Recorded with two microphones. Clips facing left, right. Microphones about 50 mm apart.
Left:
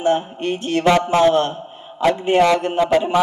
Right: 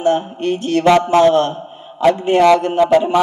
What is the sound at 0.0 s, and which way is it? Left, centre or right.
A man's voice, left.